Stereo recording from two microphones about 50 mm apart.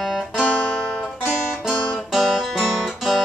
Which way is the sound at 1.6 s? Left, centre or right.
Centre.